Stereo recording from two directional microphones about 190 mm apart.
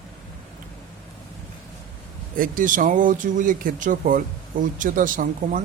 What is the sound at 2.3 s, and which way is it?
Speech, 45° right (ahead or behind).